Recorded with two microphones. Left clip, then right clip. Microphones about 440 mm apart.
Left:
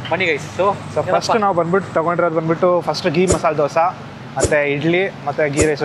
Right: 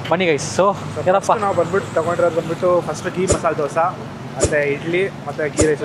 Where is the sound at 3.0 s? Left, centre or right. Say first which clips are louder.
Left 3 dB; left.